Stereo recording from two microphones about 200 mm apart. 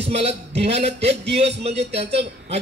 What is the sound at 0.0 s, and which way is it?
A man's voice, 30° right (ahead or behind).